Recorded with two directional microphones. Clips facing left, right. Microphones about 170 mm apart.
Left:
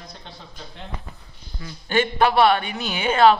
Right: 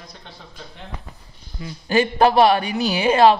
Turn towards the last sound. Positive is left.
turn(degrees=-35)  # may be behind; listen again after turning